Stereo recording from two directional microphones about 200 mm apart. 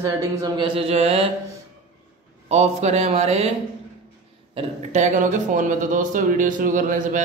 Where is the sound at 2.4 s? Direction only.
35° right (ahead or behind).